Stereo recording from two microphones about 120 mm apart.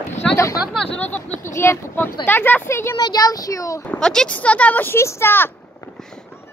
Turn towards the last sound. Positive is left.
turn(degrees=20)  # may be behind; listen again after turning